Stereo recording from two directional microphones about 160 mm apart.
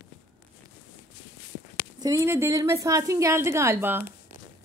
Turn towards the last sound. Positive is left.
turn(degrees=-15)  # may be behind; listen again after turning